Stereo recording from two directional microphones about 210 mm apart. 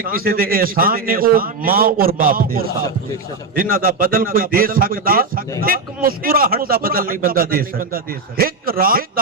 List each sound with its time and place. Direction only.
0.0 s a man's voice: 45° right (ahead or behind)